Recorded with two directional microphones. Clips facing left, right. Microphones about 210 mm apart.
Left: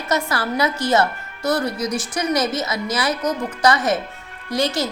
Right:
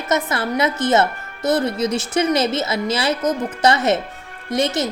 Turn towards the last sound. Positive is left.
turn(degrees=-25)  # may be behind; listen again after turning